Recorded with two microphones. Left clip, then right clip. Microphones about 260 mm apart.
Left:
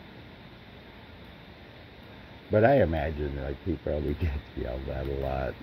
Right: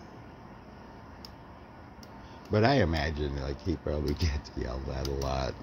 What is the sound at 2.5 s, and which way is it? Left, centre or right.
A man's voice, centre.